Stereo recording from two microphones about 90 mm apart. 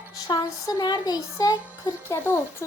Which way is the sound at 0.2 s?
50° left (ahead or behind).